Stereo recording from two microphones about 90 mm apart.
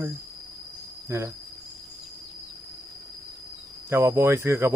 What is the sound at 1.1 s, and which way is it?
Speech, 30° right (ahead or behind).